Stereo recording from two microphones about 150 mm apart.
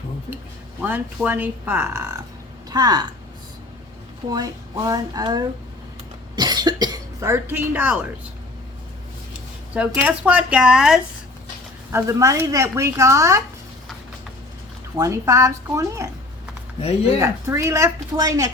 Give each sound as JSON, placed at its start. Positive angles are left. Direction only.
{"t": 0.8, "sound": "speech", "side_deg": -10}
{"t": 4.3, "sound": "speech", "side_deg": -25}
{"t": 9.7, "sound": "speech", "side_deg": -10}
{"t": 11.9, "sound": "speech", "side_deg": -20}
{"t": 14.9, "sound": "speech", "side_deg": -20}
{"t": 17.2, "sound": "speech", "side_deg": -20}